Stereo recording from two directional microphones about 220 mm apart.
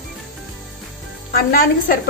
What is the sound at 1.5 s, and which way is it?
Speech, 40° left (ahead or behind).